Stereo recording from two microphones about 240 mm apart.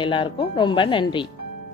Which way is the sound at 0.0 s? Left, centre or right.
Left.